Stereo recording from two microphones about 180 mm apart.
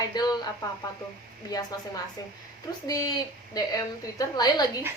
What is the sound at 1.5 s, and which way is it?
Speech, 20° left (ahead or behind).